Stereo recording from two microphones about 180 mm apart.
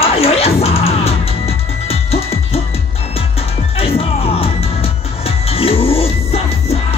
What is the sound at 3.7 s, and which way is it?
Music, 30° left (ahead or behind).